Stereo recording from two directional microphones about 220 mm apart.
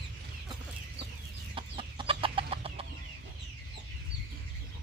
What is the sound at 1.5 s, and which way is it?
Chicken, 25° right (ahead or behind).